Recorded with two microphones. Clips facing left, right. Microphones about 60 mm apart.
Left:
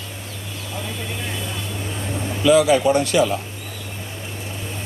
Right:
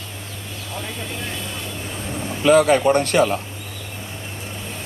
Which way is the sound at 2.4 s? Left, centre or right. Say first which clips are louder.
Right 1 dB; right.